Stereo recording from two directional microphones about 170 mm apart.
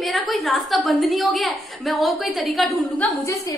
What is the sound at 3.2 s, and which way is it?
Speech, 20° left (ahead or behind).